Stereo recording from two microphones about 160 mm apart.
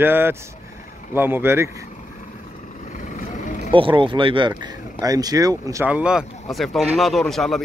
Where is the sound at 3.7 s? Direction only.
30° right (ahead or behind).